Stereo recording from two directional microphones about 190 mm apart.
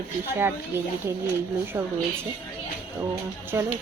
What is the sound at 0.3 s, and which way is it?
Speech, 10° right (ahead or behind).